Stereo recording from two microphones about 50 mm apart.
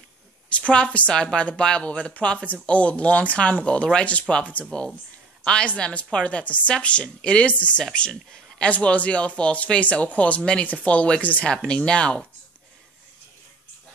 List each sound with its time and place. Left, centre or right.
0.6 s speech: left
7.8 s speech: centre; by 11.4 s left
11.4 s speech: centre